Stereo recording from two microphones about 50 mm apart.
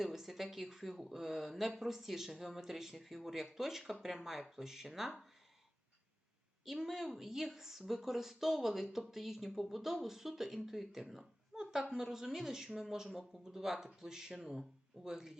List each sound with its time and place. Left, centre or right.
0.0 s a woman's voice: centre
6.7 s a woman's voice: centre